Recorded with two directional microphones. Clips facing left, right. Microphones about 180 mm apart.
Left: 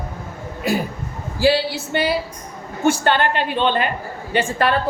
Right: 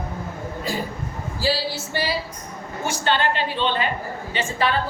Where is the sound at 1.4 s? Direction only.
65° left (ahead or behind).